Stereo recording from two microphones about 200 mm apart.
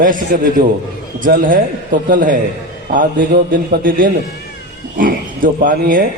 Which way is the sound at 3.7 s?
45° right (ahead or behind).